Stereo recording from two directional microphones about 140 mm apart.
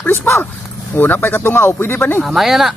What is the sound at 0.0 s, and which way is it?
Speech, 10° left (ahead or behind).